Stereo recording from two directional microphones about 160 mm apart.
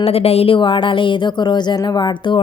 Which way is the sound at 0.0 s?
40° left (ahead or behind).